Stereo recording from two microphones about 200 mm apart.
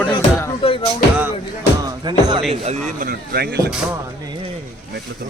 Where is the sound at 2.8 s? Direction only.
45° right (ahead or behind).